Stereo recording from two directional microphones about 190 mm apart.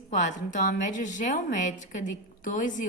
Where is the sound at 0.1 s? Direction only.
40° left (ahead or behind).